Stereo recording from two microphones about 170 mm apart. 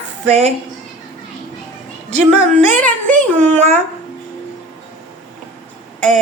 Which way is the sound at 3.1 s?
10° left (ahead or behind).